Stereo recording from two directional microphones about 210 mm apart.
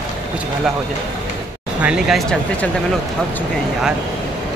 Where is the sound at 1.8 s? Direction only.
5° right (ahead or behind).